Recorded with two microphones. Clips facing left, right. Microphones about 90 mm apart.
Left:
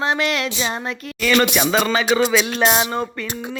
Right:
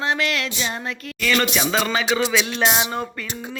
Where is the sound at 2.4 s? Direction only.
45° left (ahead or behind).